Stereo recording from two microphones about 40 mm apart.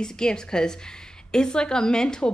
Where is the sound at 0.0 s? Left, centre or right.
Centre.